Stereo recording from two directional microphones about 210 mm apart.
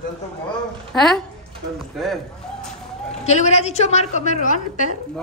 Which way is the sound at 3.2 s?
35° left (ahead or behind).